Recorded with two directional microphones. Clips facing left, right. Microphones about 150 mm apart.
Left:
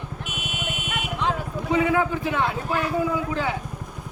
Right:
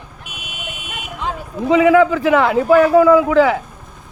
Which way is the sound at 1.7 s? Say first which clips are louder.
Right 10 dB; 90° right.